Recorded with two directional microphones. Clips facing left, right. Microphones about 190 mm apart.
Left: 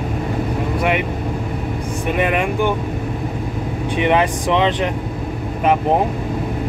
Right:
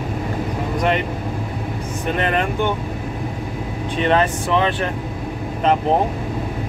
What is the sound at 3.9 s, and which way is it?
Speech, 15° left (ahead or behind).